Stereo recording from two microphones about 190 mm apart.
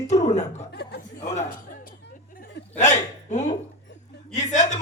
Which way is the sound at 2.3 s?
35° left (ahead or behind).